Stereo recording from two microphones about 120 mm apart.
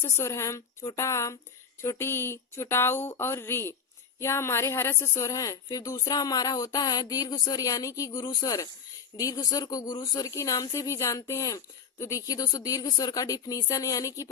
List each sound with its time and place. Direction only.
0.0 s a woman's voice: 25° left (ahead or behind)